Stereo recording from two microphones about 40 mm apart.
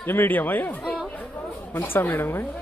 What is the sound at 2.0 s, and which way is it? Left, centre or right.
Speech, left.